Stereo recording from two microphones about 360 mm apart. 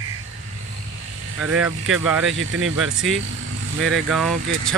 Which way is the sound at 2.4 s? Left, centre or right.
Right.